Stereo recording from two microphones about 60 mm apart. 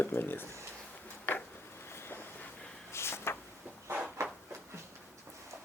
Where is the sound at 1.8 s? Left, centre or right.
Left.